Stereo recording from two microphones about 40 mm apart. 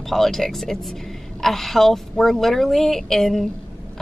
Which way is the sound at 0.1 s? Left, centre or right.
Centre.